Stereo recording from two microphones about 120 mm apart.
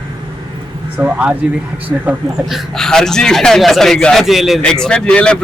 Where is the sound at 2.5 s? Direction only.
5° left (ahead or behind).